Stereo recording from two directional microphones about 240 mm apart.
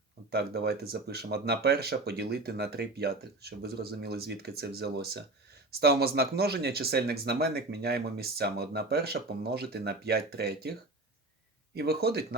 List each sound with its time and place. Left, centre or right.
0.3 s speech: right